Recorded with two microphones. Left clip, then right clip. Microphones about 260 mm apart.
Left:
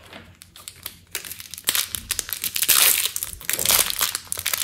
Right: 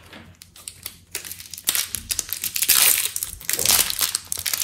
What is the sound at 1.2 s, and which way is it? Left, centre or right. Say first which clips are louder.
Tearing: left 1 dB; centre.